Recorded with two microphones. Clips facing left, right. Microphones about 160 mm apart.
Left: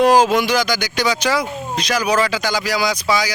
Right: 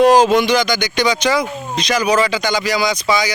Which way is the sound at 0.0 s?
10° left (ahead or behind).